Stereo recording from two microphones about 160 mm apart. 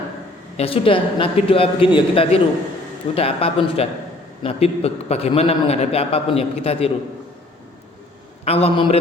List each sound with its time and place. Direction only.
0.5 s a man's voice: 35° left (ahead or behind)
8.4 s a man's voice: 40° left (ahead or behind)